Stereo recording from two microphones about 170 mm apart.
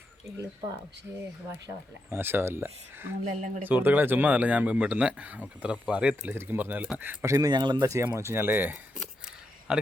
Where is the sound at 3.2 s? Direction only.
45° right (ahead or behind).